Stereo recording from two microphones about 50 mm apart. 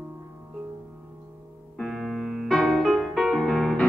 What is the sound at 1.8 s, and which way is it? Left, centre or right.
Music, centre.